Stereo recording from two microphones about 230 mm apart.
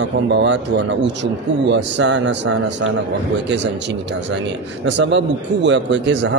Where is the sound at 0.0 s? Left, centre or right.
Right.